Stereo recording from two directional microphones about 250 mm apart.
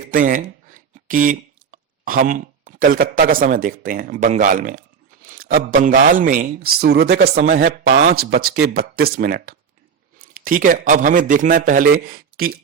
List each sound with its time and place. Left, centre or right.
0.0 s a man's voice: right